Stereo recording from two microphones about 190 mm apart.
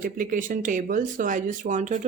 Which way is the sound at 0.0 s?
45° right (ahead or behind).